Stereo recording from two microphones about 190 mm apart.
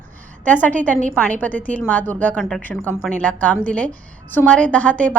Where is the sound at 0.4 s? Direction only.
10° left (ahead or behind).